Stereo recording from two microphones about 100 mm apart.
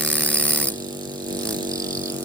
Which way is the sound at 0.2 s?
25° right (ahead or behind).